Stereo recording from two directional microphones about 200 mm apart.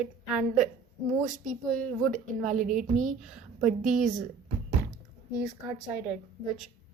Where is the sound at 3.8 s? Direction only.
40° right (ahead or behind).